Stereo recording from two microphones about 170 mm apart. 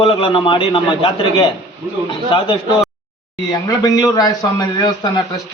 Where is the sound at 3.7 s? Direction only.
20° left (ahead or behind).